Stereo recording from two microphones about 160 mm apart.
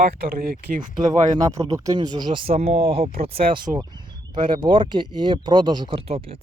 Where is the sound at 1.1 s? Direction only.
25° right (ahead or behind).